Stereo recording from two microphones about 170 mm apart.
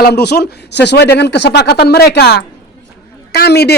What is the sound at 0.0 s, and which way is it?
Speech, 70° left (ahead or behind).